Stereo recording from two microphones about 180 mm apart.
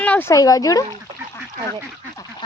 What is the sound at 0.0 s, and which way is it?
Speech, 10° left (ahead or behind).